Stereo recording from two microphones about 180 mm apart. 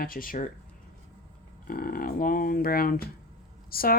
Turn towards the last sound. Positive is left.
turn(degrees=55)  # may be behind; listen again after turning